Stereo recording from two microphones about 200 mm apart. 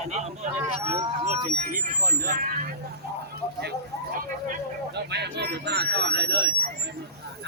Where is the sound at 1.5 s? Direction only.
45° right (ahead or behind).